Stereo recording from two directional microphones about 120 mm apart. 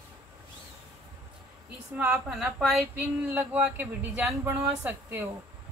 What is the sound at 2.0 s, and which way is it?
Speech, 10° right (ahead or behind).